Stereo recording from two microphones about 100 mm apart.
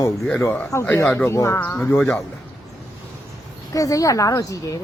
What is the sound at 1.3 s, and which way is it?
Speech, 30° left (ahead or behind).